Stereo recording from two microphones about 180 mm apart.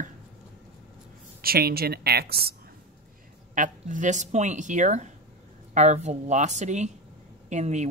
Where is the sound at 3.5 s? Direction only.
45° right (ahead or behind).